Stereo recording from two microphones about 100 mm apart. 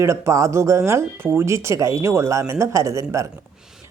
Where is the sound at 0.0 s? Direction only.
30° right (ahead or behind).